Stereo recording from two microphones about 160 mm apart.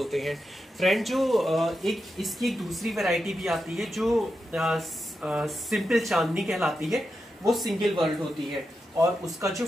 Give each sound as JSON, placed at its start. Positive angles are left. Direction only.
{"t": 0.0, "sound": "speech", "side_deg": 0}
{"t": 9.2, "sound": "speech", "side_deg": -20}